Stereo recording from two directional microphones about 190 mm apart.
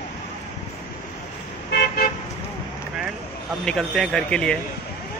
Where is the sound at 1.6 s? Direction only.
55° left (ahead or behind).